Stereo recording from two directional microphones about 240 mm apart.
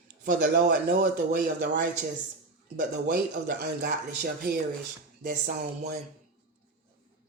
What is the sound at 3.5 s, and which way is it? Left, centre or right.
Speech, right.